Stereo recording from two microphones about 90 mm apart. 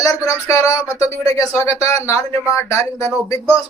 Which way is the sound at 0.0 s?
35° left (ahead or behind).